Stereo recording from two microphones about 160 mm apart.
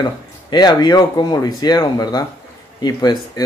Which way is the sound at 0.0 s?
25° left (ahead or behind).